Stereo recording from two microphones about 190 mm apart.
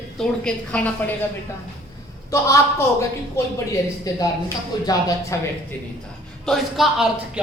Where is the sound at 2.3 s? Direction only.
15° left (ahead or behind).